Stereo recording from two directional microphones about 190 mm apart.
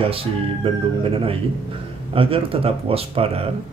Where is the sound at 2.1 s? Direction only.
30° right (ahead or behind).